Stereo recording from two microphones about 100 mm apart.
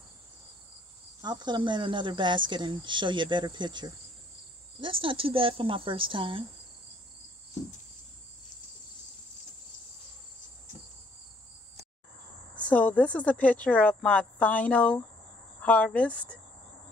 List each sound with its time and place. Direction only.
1.2 s speech: 45° right (ahead or behind)
12.5 s speech: 15° left (ahead or behind)